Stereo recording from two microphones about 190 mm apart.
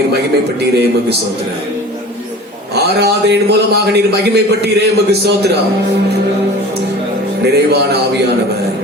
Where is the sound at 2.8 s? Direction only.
60° right (ahead or behind).